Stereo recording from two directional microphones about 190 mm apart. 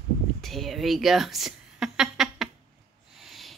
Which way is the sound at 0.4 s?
Centre (ahead or behind).